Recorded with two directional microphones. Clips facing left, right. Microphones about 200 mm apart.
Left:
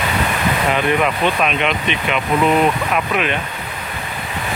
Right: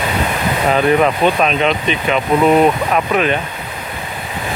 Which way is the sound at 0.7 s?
35° right (ahead or behind).